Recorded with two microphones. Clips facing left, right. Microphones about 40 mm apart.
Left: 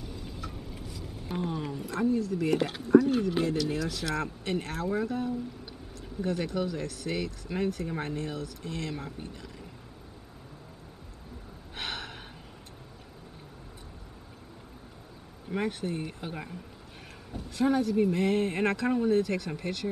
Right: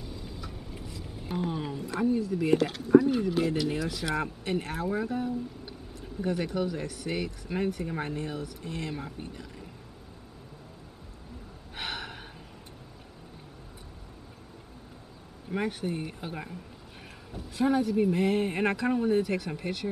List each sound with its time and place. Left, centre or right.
0.5 s vehicle: centre
1.0 s speech: centre
2.5 s speech: centre
2.9 s speech: centre
6.2 s speech: centre
11.7 s gasp: centre
15.5 s speech: centre
17.6 s speech: centre